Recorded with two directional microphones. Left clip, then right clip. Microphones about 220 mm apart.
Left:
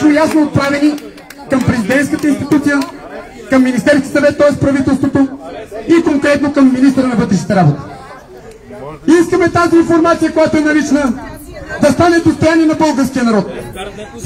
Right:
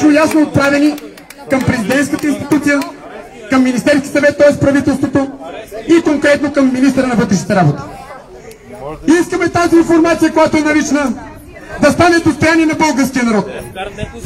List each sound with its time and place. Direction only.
0.1 s speech: 30° right (ahead or behind)
9.3 s speech: 25° right (ahead or behind)